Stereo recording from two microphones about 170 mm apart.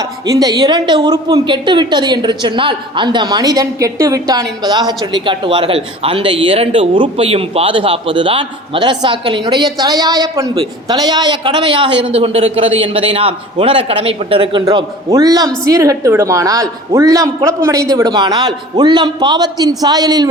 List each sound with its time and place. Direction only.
0.0 s a man's voice: 20° right (ahead or behind)
14.6 s speech: 20° right (ahead or behind)